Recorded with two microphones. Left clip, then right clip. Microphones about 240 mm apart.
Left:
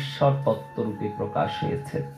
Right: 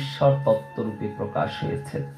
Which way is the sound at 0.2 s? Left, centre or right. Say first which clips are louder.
Right 3 dB; right.